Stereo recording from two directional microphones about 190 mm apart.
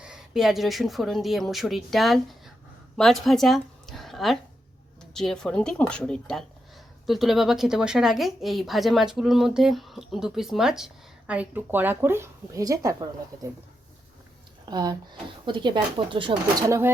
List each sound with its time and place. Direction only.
0.0 s a woman's voice: 5° right (ahead or behind)
14.7 s speech: 20° right (ahead or behind)